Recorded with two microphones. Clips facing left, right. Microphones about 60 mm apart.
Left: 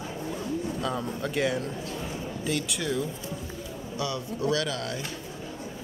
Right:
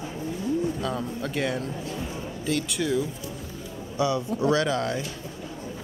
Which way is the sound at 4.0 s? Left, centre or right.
Right.